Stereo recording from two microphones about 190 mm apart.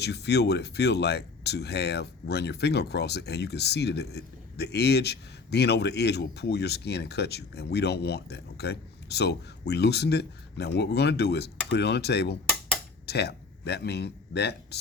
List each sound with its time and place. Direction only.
0.0 s speech: 60° left (ahead or behind)